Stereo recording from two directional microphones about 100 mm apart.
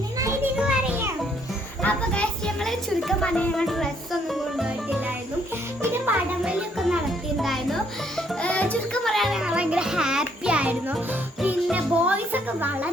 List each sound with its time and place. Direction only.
0.5 s music: 10° right (ahead or behind)
1.8 s a sound: 10° left (ahead or behind)
4.3 s music: 5° right (ahead or behind)
6.4 s music: 5° right (ahead or behind)